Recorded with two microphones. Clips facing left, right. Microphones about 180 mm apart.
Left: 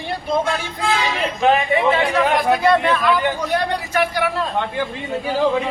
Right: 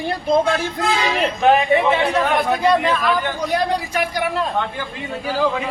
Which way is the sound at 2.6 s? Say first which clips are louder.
Even; 15° right (ahead or behind).